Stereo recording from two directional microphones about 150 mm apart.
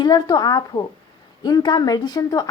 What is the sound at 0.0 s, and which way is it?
Speech, 25° left (ahead or behind).